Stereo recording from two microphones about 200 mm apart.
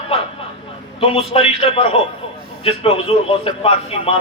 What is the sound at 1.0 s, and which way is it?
Speech, 30° left (ahead or behind).